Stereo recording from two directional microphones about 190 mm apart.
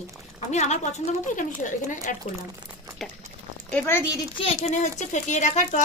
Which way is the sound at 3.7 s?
10° left (ahead or behind).